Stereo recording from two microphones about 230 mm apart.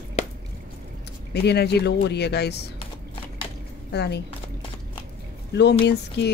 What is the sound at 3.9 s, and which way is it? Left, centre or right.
Speech, left.